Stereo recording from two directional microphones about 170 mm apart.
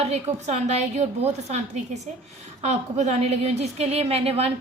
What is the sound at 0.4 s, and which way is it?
A woman's voice, 40° right (ahead or behind).